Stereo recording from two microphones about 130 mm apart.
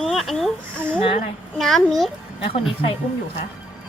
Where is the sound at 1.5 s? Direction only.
Centre (ahead or behind).